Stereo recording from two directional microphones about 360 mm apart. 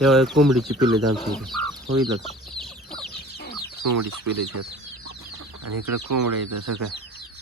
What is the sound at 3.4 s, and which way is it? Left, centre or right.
Chicken, left.